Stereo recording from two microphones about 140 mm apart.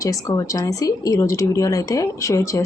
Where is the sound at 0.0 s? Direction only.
25° left (ahead or behind).